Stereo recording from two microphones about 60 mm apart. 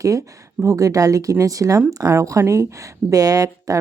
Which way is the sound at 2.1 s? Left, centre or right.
Right.